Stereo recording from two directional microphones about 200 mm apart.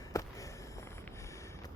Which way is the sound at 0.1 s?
15° left (ahead or behind).